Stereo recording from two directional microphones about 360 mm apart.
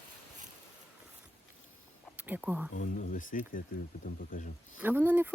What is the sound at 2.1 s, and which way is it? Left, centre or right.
Speech, centre.